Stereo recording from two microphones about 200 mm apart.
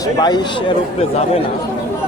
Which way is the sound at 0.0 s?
20° left (ahead or behind).